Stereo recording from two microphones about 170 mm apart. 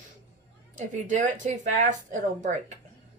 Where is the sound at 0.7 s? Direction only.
45° right (ahead or behind).